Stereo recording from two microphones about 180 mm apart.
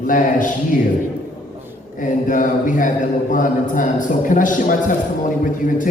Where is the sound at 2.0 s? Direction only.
45° left (ahead or behind).